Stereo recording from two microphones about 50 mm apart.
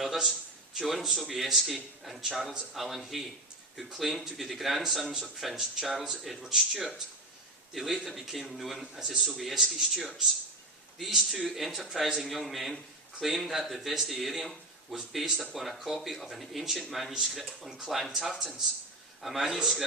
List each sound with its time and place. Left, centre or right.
0.0 s a sound: centre
0.8 s speech: centre
11.1 s speech: centre